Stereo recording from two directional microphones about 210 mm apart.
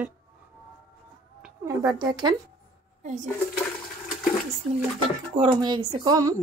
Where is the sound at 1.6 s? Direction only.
20° right (ahead or behind).